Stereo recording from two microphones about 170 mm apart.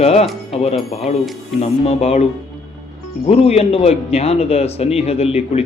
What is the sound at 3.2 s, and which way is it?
Speech, 35° left (ahead or behind).